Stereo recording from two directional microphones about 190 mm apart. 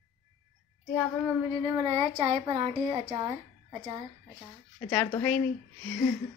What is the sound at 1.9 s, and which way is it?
A woman's voice, 30° right (ahead or behind).